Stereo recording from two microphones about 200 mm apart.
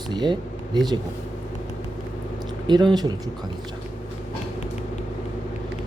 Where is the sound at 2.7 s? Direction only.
20° right (ahead or behind).